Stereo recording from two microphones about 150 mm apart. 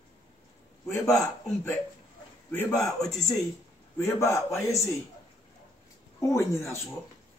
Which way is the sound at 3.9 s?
20° left (ahead or behind).